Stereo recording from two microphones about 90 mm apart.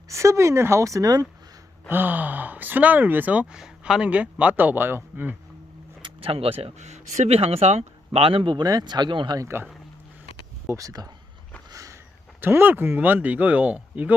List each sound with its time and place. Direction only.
0.1 s a woman's voice: 35° right (ahead or behind)
1.9 s speech: 20° right (ahead or behind)
6.0 s speech: 90° right
8.5 s speech: 50° right (ahead or behind)
9.4 s speech: 30° right (ahead or behind)
10.7 s a woman's voice: 40° right (ahead or behind)
11.7 s a sound: 40° right (ahead or behind)
12.4 s speech: 25° right (ahead or behind)